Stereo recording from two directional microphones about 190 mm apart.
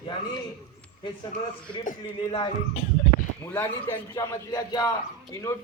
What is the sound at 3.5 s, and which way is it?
A man's voice, 10° left (ahead or behind).